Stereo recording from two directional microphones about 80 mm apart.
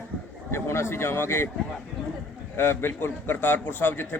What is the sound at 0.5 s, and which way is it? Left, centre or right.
Speech, left.